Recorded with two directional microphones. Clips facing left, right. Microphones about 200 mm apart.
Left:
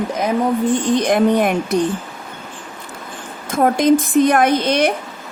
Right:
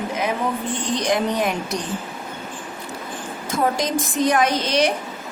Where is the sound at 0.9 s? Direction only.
55° left (ahead or behind).